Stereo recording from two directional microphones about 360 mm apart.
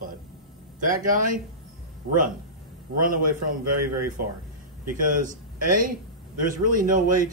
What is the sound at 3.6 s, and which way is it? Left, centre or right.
Speech, right.